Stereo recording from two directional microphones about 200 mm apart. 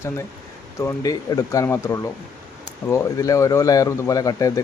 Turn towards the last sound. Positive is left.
turn(degrees=15)  # may be behind; listen again after turning